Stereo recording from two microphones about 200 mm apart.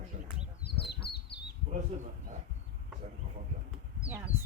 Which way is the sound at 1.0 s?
50° left (ahead or behind).